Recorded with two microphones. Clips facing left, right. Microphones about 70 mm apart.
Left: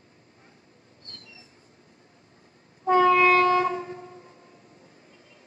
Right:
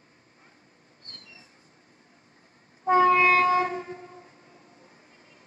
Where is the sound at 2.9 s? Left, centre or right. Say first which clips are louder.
Left 1 dB; right.